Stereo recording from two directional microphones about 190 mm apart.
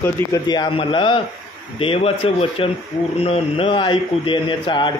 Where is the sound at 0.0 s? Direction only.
15° left (ahead or behind).